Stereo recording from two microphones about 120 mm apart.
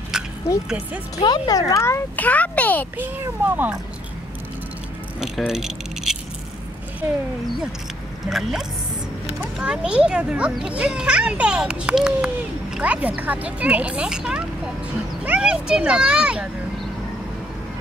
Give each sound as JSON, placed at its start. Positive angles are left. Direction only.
{"t": 0.1, "sound": "a sound", "side_deg": -5}
{"t": 0.7, "sound": "a child's voice", "side_deg": -10}
{"t": 1.1, "sound": "speech", "side_deg": 35}
{"t": 1.5, "sound": "a child's voice", "side_deg": 25}
{"t": 3.0, "sound": "a child's voice", "side_deg": -15}
{"t": 5.5, "sound": "speech", "side_deg": -5}
{"t": 8.3, "sound": "a child's voice", "side_deg": 0}